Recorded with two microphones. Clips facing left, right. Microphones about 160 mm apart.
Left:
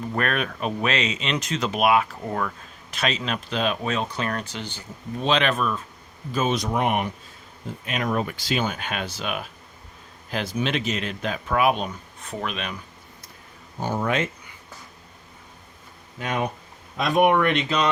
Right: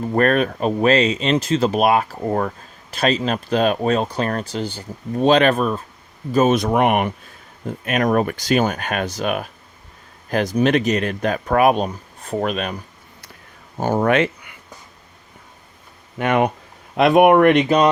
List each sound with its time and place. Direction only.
0.0 s speech: 40° right (ahead or behind); by 7.1 s 65° right (ahead or behind)
7.7 s speech: 55° right (ahead or behind)
11.9 s speech: 35° right (ahead or behind)
14.0 s speech: 70° right (ahead or behind)
16.1 s speech: 65° right (ahead or behind); by 17.8 s 50° right (ahead or behind)